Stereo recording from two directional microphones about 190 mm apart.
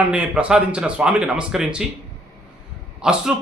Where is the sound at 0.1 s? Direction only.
5° right (ahead or behind).